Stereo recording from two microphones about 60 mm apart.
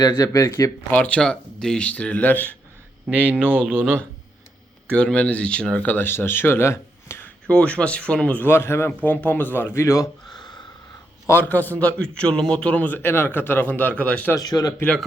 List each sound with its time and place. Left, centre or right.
0.3 s speech: left
0.9 s a man's voice: left
3.1 s speech: right
4.9 s a man's voice: centre; by 7.2 s left
7.4 s a man's voice: centre
8.4 s speech: left
9.0 s speech: left
9.8 s speech: left
11.3 s a man's voice: left
13.0 s speech: left
14.3 s speech: left